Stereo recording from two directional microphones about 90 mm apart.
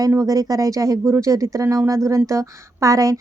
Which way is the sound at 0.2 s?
40° right (ahead or behind).